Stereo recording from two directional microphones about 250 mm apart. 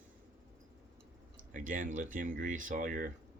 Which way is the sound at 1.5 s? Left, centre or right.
Right.